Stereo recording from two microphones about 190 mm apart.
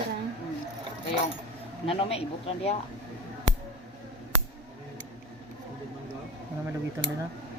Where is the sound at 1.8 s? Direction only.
30° left (ahead or behind).